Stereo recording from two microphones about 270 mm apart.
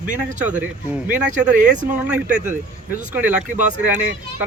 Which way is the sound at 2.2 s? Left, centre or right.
Right.